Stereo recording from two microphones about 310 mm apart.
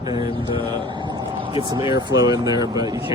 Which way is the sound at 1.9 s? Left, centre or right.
Centre.